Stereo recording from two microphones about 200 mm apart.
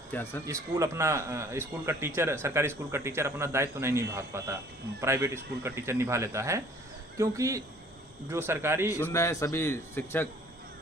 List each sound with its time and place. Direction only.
0.1 s a man's voice: 10° left (ahead or behind)
0.4 s speech: 15° right (ahead or behind)
8.9 s a man's voice: 15° left (ahead or behind)